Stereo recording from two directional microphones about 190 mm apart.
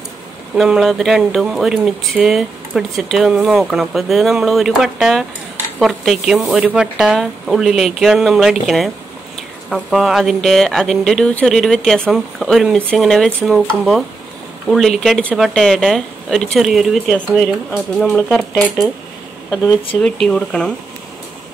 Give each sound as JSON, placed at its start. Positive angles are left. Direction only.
{"t": 0.6, "sound": "speech", "side_deg": 0}
{"t": 20.0, "sound": "speech", "side_deg": 5}